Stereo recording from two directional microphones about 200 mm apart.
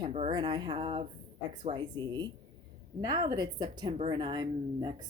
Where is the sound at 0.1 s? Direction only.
25° right (ahead or behind).